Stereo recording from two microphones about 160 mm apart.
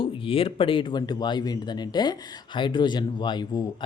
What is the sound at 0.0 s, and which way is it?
A man's voice, 35° left (ahead or behind).